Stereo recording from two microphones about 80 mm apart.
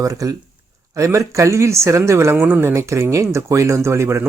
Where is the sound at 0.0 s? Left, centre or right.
Right.